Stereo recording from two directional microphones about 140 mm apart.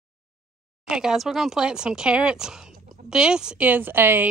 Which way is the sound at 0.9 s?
5° right (ahead or behind).